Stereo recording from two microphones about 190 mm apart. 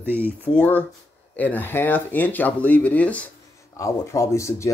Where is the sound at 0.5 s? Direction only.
25° left (ahead or behind).